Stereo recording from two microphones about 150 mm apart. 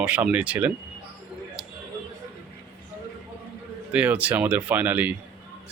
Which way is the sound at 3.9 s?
10° right (ahead or behind).